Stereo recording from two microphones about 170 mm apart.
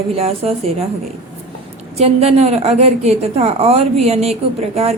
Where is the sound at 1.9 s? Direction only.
40° right (ahead or behind).